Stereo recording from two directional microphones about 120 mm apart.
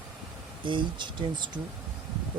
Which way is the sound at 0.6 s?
40° right (ahead or behind).